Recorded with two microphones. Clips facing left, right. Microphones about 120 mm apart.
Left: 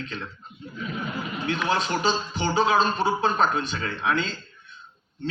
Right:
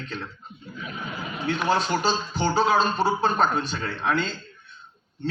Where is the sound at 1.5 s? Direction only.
40° right (ahead or behind).